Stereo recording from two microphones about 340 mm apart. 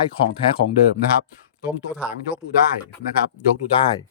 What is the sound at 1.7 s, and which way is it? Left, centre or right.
Speech, centre.